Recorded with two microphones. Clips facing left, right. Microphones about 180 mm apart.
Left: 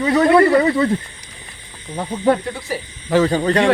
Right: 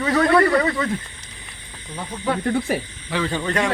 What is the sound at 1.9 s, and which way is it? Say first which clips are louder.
Speech: left 8 dB; 40° left (ahead or behind).